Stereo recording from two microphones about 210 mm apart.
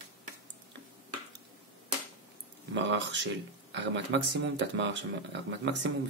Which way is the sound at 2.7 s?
55° right (ahead or behind).